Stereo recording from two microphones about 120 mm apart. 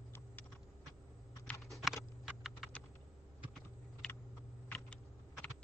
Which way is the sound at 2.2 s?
5° right (ahead or behind).